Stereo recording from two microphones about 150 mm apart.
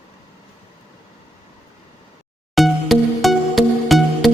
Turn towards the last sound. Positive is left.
turn(degrees=0)  # may be behind; listen again after turning